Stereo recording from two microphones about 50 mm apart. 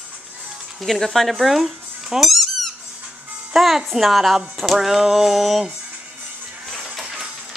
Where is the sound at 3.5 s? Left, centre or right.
Centre.